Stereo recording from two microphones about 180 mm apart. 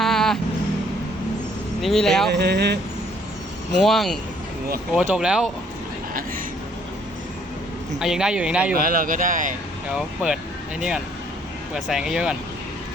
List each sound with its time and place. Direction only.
0.0 s vehicle: centre (ahead or behind)
1.8 s speech: centre (ahead or behind)
2.3 s speech: 65° right (ahead or behind)
3.8 s speech: centre (ahead or behind)
7.9 s speech: 5° right (ahead or behind)
8.7 s speech: 55° right (ahead or behind)
10.8 s speech: 5° right (ahead or behind)